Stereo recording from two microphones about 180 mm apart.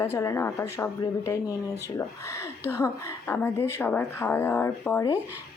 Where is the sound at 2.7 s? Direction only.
15° left (ahead or behind).